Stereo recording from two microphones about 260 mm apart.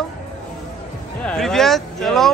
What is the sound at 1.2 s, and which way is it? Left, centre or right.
Speech, centre.